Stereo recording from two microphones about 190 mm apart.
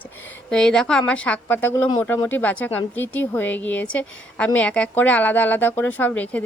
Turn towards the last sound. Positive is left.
turn(degrees=5)  # may be behind; listen again after turning